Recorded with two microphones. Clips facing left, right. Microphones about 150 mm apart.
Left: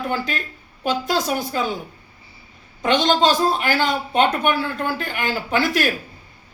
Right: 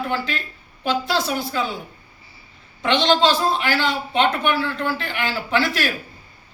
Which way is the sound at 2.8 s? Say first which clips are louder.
Even; 45° left (ahead or behind).